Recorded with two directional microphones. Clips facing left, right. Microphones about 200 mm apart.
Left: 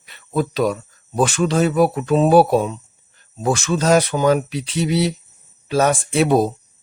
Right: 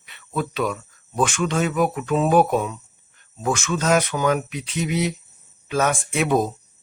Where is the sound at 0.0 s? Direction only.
40° left (ahead or behind).